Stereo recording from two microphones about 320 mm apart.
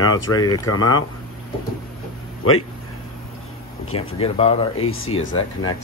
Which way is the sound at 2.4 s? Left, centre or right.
Left.